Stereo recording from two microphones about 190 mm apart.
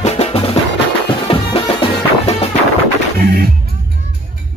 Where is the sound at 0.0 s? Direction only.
35° left (ahead or behind).